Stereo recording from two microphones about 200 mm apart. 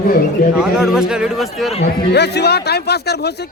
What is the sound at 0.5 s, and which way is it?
Speech, 5° right (ahead or behind).